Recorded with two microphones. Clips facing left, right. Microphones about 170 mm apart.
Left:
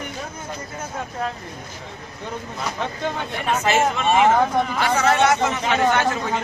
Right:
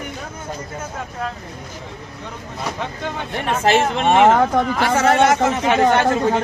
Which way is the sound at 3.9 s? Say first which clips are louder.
Right 4 dB; 60° right (ahead or behind).